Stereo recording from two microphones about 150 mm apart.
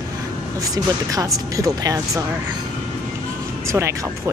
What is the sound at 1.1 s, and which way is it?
Speech, 25° right (ahead or behind).